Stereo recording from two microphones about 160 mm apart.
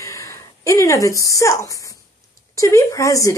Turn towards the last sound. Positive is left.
turn(degrees=20)  # may be behind; listen again after turning